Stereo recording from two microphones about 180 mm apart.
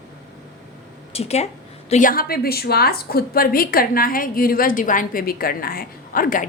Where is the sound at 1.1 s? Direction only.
35° left (ahead or behind).